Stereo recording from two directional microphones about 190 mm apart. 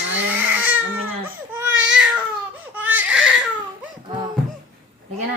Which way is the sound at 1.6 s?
10° right (ahead or behind).